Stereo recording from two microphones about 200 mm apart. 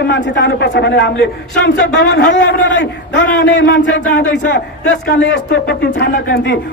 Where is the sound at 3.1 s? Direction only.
65° left (ahead or behind).